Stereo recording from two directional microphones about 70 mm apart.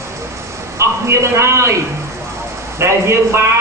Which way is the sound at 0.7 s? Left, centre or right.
Right.